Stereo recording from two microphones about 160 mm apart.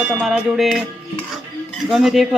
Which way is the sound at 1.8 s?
5° right (ahead or behind).